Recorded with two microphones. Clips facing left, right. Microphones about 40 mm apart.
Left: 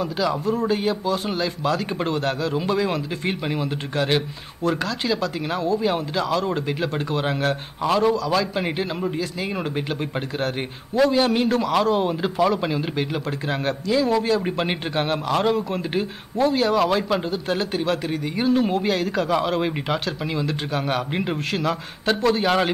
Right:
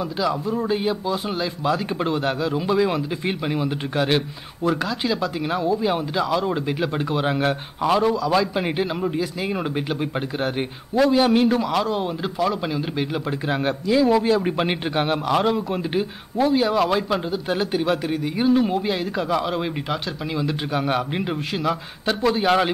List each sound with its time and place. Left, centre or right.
0.5 s speech: centre
2.5 s speech: centre
3.6 s a man's voice: centre
5.4 s speech: centre
11.7 s speech: centre
13.5 s speech: centre
14.4 s speech: centre
17.5 s speech: centre
18.3 s speech: centre
18.9 s speech: centre
19.3 s speech: centre